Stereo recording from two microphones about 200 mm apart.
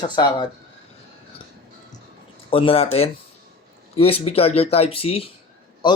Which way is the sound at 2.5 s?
25° left (ahead or behind).